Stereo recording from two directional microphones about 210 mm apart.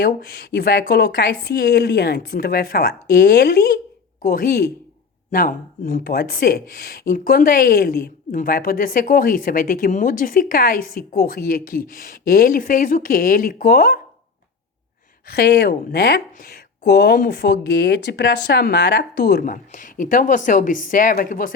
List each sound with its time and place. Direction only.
0.0 s a woman's voice: 50° left (ahead or behind)
15.3 s a woman's voice: 50° left (ahead or behind)